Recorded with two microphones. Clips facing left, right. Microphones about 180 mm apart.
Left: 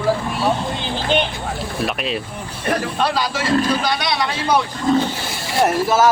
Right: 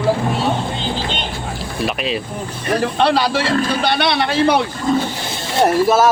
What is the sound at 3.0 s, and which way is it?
A man's voice, 65° right (ahead or behind).